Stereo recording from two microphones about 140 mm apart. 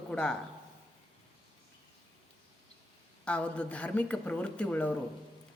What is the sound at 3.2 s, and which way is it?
Speech, 10° left (ahead or behind).